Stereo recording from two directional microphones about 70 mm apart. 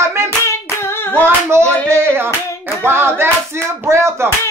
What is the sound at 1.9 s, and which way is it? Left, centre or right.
Hands, right.